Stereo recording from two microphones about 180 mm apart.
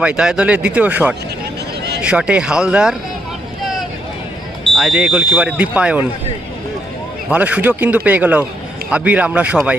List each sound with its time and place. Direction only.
0.0 s speech: 5° right (ahead or behind)
4.7 s speech: 5° right (ahead or behind)
7.3 s speech: 5° right (ahead or behind)